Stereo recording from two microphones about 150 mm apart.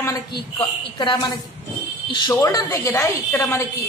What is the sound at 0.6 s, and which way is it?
A woman's voice, 30° left (ahead or behind).